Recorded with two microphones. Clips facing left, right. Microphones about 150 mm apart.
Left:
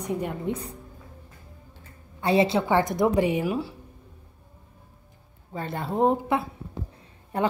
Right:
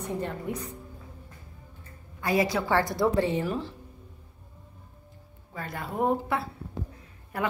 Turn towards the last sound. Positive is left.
turn(degrees=25)  # may be behind; listen again after turning